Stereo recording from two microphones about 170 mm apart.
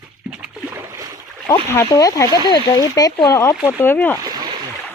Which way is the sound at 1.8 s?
20° left (ahead or behind).